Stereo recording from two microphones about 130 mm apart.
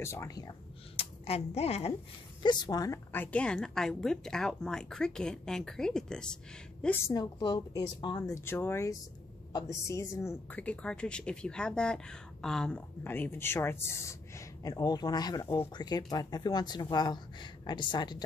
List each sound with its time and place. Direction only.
0.0 s a woman's voice: 20° left (ahead or behind)
0.9 s speech: 50° left (ahead or behind)
2.4 s speech: 35° left (ahead or behind)
3.1 s a woman's voice: 15° left (ahead or behind)
7.1 s speech: 30° left (ahead or behind)
8.3 s a woman's voice: 15° left (ahead or behind)
10.5 s speech: 10° left (ahead or behind); by 15.4 s 30° left (ahead or behind)
15.4 s a woman's voice: 20° left (ahead or behind)
15.7 s speech: 35° left (ahead or behind)